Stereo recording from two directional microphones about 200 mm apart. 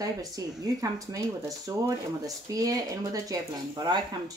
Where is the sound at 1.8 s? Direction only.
15° right (ahead or behind).